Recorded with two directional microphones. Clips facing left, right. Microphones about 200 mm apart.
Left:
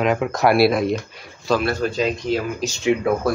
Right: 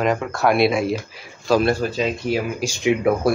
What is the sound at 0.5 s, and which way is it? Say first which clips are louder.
Speech: left 1 dB; centre (ahead or behind).